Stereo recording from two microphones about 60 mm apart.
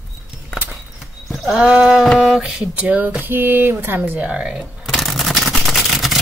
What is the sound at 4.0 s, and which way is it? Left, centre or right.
Speech, right.